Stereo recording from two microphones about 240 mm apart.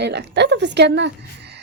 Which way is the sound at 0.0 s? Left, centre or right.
Right.